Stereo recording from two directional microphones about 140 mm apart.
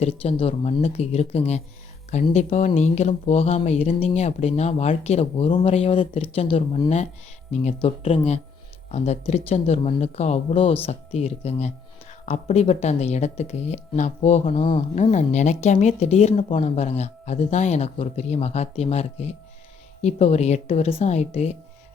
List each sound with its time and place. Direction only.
0.0 s speech: 45° left (ahead or behind)
7.5 s speech: 50° left (ahead or behind)
14.6 s a woman's voice: 35° left (ahead or behind)
14.9 s speech: 55° left (ahead or behind)